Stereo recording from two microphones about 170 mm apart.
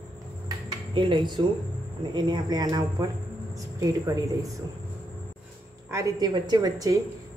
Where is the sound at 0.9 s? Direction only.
30° right (ahead or behind).